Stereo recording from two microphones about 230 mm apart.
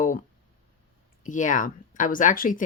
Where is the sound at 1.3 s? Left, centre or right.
Left.